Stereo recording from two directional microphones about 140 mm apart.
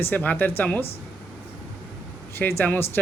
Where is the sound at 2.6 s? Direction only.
15° left (ahead or behind).